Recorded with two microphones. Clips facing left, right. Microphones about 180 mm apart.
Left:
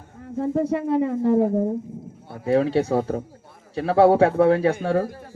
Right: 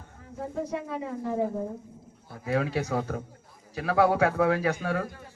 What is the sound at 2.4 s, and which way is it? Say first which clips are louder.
A man's voice: left 8 dB; 30° left (ahead or behind).